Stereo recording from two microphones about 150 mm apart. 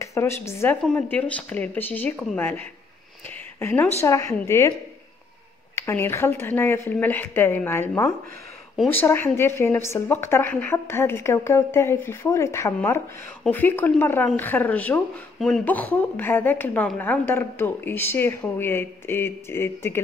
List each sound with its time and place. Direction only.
0.0 s a woman's voice: 20° left (ahead or behind)
5.8 s speech: 15° left (ahead or behind)